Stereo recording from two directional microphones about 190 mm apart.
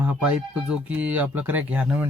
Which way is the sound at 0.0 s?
5° right (ahead or behind).